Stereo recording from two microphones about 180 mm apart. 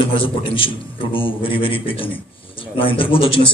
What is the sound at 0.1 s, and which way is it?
A man's voice, 30° left (ahead or behind).